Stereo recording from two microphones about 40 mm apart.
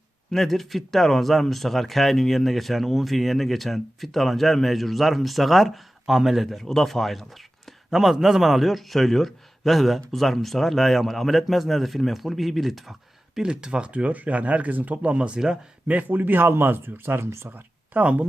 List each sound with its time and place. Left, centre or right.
0.3 s speech: centre
6.6 s speech: centre
7.9 s speech: centre
13.5 s speech: right
15.0 s speech: right
16.0 s speech: right
17.9 s speech: right